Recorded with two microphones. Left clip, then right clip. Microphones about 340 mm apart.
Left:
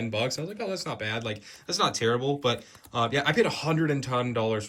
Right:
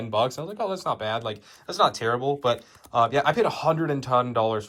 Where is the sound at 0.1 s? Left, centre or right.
Centre.